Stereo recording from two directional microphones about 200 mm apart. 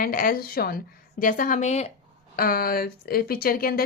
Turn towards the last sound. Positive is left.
turn(degrees=45)  # may be behind; listen again after turning